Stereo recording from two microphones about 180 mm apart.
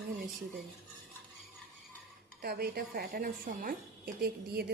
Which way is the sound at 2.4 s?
60° right (ahead or behind).